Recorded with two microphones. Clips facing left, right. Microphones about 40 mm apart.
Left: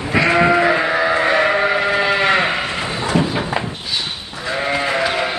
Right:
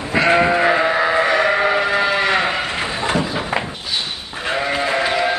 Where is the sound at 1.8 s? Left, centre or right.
Left.